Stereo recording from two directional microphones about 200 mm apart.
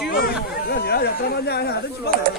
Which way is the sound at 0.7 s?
55° left (ahead or behind).